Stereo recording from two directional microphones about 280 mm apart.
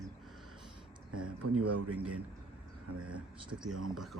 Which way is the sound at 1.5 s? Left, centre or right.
Right.